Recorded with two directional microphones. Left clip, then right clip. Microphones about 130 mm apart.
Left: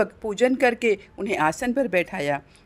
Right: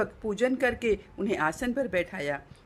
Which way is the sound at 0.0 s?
40° left (ahead or behind).